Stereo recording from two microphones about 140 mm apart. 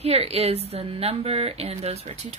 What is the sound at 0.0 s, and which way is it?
Speech, 45° right (ahead or behind).